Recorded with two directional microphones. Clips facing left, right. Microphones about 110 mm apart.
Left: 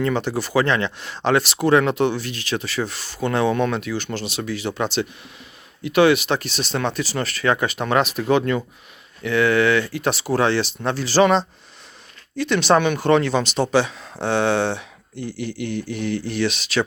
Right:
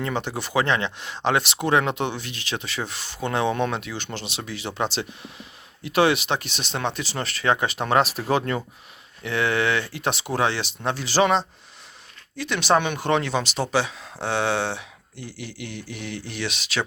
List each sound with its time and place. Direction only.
0.0 s speech: 20° right (ahead or behind)